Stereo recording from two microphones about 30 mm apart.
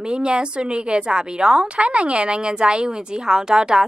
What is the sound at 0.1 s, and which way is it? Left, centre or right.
A woman's voice, right.